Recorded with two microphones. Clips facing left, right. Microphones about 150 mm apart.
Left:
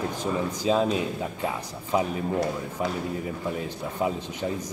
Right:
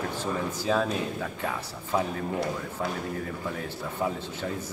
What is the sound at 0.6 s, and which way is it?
Speech, 20° left (ahead or behind).